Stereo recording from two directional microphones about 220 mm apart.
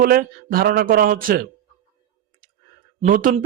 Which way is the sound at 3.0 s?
35° right (ahead or behind).